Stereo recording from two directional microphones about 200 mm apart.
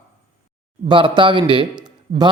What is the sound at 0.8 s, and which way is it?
Speech, 25° right (ahead or behind).